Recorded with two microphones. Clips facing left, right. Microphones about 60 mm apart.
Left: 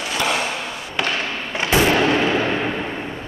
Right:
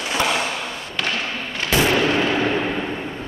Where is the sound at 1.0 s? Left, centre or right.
Centre.